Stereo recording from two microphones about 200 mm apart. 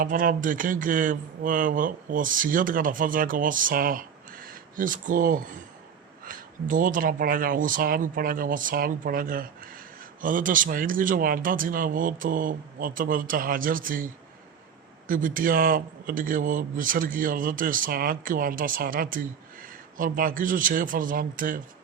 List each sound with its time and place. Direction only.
0.0 s speech: 45° right (ahead or behind)